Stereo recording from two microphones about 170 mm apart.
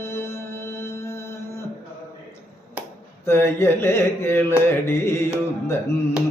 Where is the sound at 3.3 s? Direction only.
15° left (ahead or behind).